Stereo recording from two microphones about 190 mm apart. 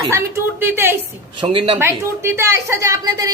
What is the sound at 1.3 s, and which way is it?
Speech, 25° right (ahead or behind).